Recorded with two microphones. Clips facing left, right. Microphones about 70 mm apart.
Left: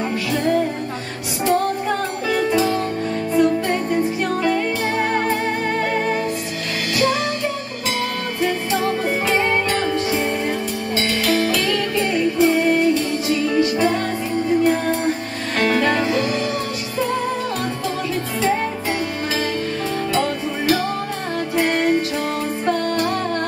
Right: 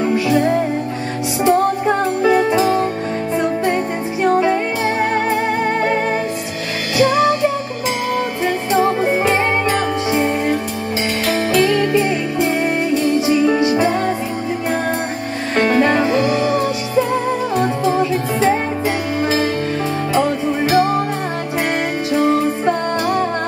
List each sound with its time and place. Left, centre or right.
1.4 s music: right
4.4 s music: centre
9.4 s music: right
17.6 s music: right
20.2 s music: centre